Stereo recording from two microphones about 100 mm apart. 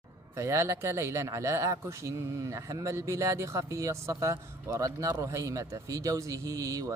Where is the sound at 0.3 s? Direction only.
30° right (ahead or behind).